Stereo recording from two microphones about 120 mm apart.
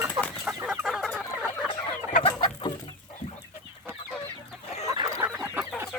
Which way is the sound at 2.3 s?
35° left (ahead or behind).